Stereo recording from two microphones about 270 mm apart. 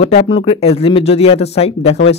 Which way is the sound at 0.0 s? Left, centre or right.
Left.